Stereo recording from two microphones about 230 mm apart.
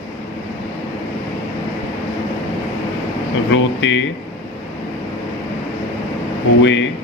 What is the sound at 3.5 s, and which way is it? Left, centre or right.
Speech, left.